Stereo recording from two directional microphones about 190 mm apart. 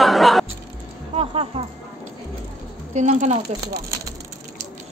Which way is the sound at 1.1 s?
30° right (ahead or behind).